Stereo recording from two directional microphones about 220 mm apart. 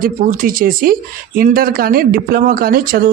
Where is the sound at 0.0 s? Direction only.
40° right (ahead or behind).